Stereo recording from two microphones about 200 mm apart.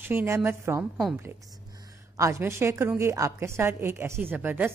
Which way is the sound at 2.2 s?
15° right (ahead or behind).